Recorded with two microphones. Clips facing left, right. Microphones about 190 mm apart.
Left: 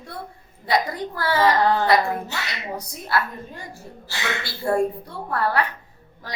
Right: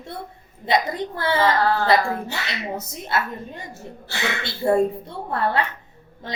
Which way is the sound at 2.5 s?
25° right (ahead or behind).